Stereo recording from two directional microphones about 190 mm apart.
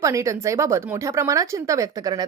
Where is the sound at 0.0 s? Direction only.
15° right (ahead or behind).